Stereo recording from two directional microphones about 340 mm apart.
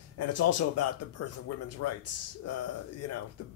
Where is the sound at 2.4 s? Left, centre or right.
Left.